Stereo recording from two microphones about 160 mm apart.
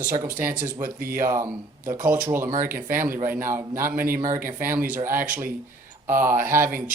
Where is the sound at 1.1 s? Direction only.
15° right (ahead or behind).